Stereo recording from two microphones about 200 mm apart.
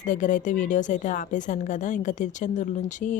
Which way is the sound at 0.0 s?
40° left (ahead or behind).